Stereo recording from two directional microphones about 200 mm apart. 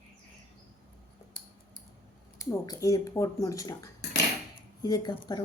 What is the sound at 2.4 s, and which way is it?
Speech, 15° left (ahead or behind).